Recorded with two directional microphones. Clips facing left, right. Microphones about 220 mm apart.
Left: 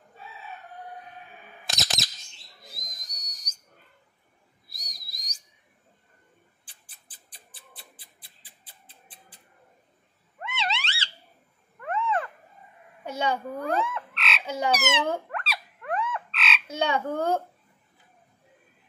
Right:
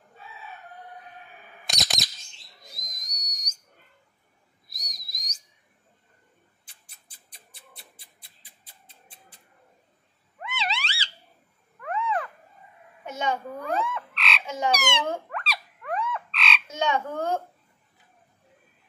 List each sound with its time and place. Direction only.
1.7 s a sound: centre (ahead or behind)
2.7 s whistle: 30° left (ahead or behind)
5.1 s whistle: 35° left (ahead or behind)
6.6 s cat: 30° left (ahead or behind)
8.0 s a sound: 30° left (ahead or behind)
10.4 s cat: centre (ahead or behind)
11.8 s a sound: centre (ahead or behind)
13.0 s a sound: 35° left (ahead or behind)
13.7 s frog: centre (ahead or behind)
14.4 s frog: 35° left (ahead or behind)
14.7 s frog: 5° left (ahead or behind)
16.6 s croak: 30° left (ahead or behind)